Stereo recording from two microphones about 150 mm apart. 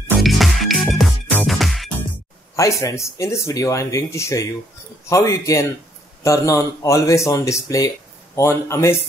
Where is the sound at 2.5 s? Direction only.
20° left (ahead or behind).